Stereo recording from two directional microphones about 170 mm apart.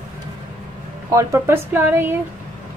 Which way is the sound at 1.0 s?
15° right (ahead or behind).